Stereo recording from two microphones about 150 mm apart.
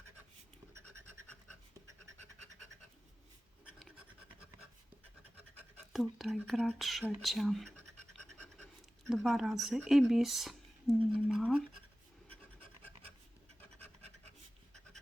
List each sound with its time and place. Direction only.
0.7 s scratch: 20° right (ahead or behind)
3.8 s scratch: 5° right (ahead or behind)
5.9 s speech: centre (ahead or behind)
9.0 s speech: centre (ahead or behind)